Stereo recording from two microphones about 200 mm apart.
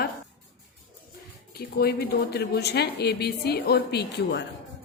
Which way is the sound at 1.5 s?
50° left (ahead or behind).